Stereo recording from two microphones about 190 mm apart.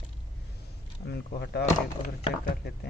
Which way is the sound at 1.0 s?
60° left (ahead or behind).